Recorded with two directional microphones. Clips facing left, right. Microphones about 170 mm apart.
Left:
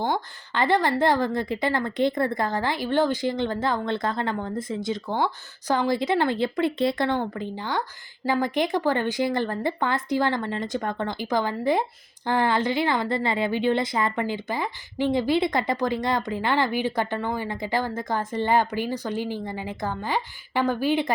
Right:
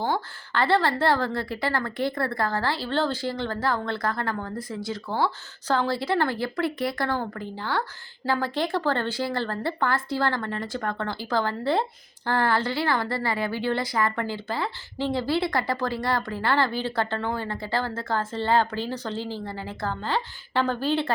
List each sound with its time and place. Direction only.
0.0 s a woman's voice: 15° left (ahead or behind)